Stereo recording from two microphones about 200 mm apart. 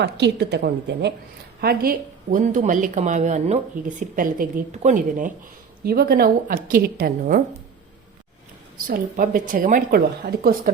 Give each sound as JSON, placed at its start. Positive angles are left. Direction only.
{"t": 0.0, "sound": "a woman's voice", "side_deg": -55}
{"t": 5.8, "sound": "a woman's voice", "side_deg": -50}
{"t": 8.9, "sound": "a woman's voice", "side_deg": -45}